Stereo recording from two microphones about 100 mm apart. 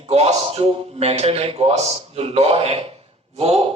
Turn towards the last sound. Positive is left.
turn(degrees=-90)